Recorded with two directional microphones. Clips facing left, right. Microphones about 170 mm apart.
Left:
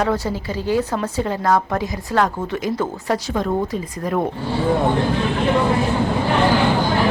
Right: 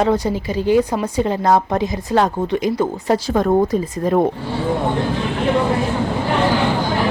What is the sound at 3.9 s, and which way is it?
Speech, 30° right (ahead or behind).